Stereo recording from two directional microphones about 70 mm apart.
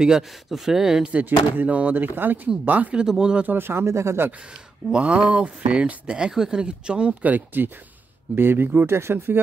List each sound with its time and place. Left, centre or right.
0.0 s speech: centre
3.4 s speech: right
4.9 s speech: centre; by 9.4 s right